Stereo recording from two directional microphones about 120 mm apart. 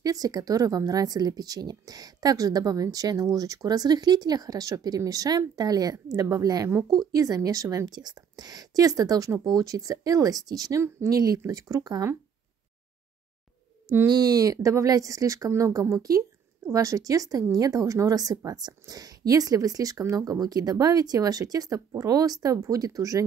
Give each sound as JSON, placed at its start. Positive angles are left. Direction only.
{"t": 0.0, "sound": "speech", "side_deg": -30}
{"t": 14.0, "sound": "speech", "side_deg": -30}